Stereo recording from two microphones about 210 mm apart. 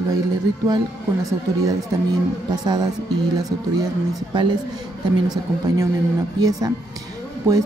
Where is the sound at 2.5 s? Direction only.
20° right (ahead or behind).